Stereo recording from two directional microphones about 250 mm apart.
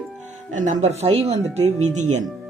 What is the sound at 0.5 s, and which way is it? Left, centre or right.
Speech, right.